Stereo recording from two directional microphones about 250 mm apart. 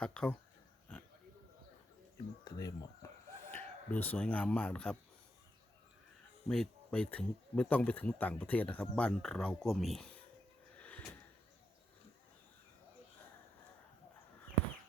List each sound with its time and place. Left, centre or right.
0.0 s speech: centre
0.9 s oink: centre
2.4 s speech: centre
6.5 s speech: centre
10.8 s a sound: centre